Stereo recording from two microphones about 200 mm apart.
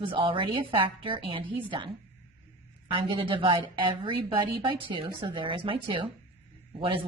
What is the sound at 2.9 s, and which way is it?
A woman's voice, 25° right (ahead or behind).